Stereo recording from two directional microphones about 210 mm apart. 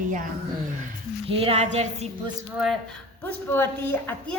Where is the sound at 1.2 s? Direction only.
25° right (ahead or behind).